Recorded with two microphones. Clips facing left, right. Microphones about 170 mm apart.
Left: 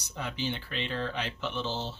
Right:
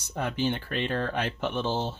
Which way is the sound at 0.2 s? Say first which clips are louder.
Right 6 dB; 50° right (ahead or behind).